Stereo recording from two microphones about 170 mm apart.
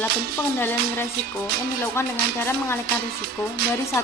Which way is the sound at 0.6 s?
10° left (ahead or behind).